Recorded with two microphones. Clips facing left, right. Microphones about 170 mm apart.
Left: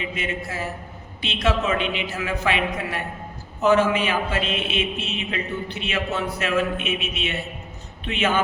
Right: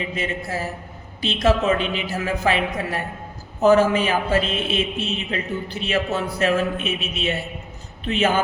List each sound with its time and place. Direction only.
0.0 s a man's voice: 35° right (ahead or behind)